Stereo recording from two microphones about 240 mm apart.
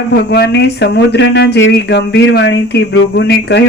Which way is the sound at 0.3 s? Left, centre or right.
Left.